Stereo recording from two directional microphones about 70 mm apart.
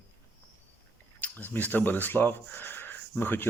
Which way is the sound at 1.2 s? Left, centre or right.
Left.